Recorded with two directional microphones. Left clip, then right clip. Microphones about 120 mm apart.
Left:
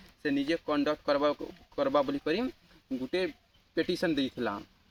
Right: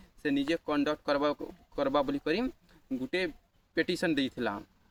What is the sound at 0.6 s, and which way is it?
Speech, 15° right (ahead or behind).